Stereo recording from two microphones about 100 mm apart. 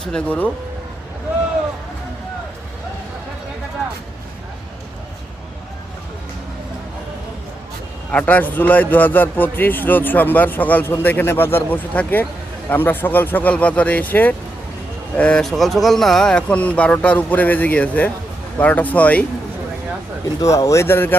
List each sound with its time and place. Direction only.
0.0 s speech: 10° left (ahead or behind)
8.1 s a man's voice: 15° left (ahead or behind)
20.4 s a man's voice: 30° left (ahead or behind)